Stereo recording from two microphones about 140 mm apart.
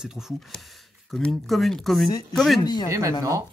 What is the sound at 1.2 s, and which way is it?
Speech, centre (ahead or behind).